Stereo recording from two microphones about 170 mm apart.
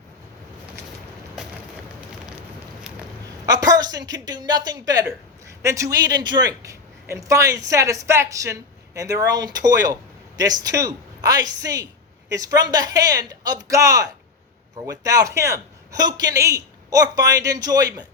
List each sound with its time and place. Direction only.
3.4 s a woman's voice: 20° right (ahead or behind)